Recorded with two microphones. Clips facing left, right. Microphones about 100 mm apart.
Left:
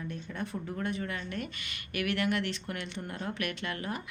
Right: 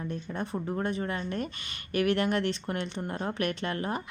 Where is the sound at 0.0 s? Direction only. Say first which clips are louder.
Right 3 dB; 30° right (ahead or behind).